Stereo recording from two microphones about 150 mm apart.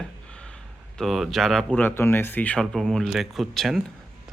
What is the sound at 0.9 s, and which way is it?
Speech, centre (ahead or behind).